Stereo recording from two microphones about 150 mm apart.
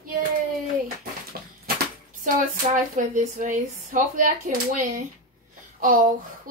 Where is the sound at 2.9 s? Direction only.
55° right (ahead or behind).